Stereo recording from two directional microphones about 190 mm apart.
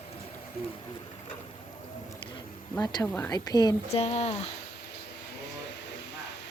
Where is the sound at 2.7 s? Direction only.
20° left (ahead or behind).